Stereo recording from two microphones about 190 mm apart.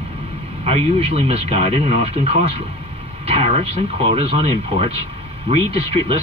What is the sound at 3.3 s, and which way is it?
Music, 35° right (ahead or behind).